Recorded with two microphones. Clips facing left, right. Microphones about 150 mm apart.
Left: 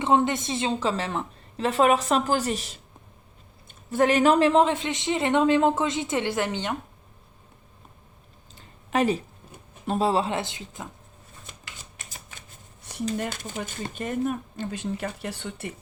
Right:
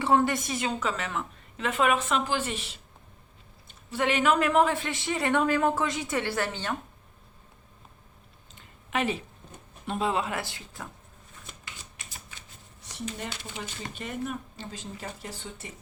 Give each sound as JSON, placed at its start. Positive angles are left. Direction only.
{"t": 0.0, "sound": "a woman's voice", "side_deg": 20}
{"t": 8.5, "sound": "a sound", "side_deg": 40}
{"t": 9.8, "sound": "a woman's voice", "side_deg": 35}
{"t": 11.9, "sound": "typewriter", "side_deg": 50}
{"t": 13.1, "sound": "speech", "side_deg": 50}